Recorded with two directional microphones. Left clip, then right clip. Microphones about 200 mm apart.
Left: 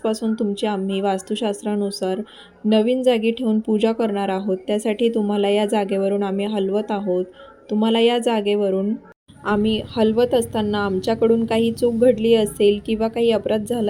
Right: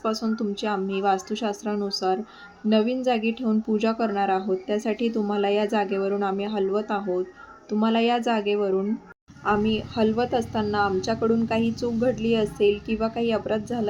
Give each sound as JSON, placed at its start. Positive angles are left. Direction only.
{"t": 0.0, "sound": "a woman's voice", "side_deg": 20}